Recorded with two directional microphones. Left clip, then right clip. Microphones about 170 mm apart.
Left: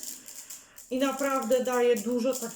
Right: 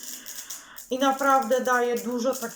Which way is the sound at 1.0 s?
20° left (ahead or behind).